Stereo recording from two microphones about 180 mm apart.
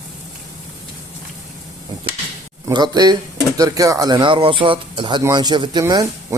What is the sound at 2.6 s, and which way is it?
Speech, 25° right (ahead or behind).